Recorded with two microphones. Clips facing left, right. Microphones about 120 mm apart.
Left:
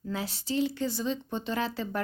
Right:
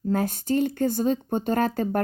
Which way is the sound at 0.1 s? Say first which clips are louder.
Right 9 dB; 50° right (ahead or behind).